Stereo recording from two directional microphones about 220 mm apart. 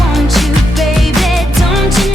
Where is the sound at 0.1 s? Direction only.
Centre (ahead or behind).